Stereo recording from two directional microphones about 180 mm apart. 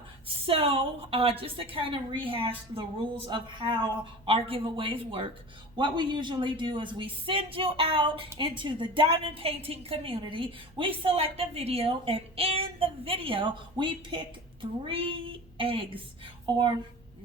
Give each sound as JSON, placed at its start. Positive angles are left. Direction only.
{"t": 0.4, "sound": "a woman's voice", "side_deg": -30}